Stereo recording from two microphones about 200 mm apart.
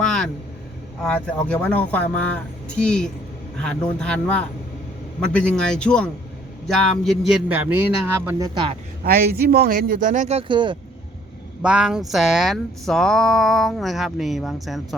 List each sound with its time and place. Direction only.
0.0 s vehicle: centre (ahead or behind)
1.0 s a man's voice: 5° left (ahead or behind); by 8.4 s 10° right (ahead or behind)
8.5 s speech: 25° right (ahead or behind)
9.0 s a man's voice: 50° right (ahead or behind); by 10.8 s 25° right (ahead or behind)
11.6 s speech: 5° right (ahead or behind)